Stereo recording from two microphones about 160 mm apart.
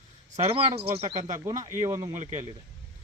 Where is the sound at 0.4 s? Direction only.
35° right (ahead or behind).